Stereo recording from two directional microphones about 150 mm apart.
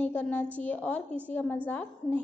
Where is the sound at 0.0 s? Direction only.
10° left (ahead or behind).